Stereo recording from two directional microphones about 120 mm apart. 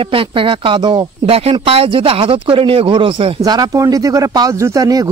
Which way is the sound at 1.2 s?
55° right (ahead or behind).